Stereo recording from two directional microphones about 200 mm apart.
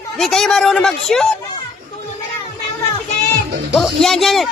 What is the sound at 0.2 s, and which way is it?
Speech, centre (ahead or behind).